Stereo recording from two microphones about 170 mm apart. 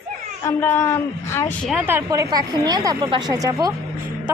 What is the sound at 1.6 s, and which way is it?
A woman's voice, 10° right (ahead or behind).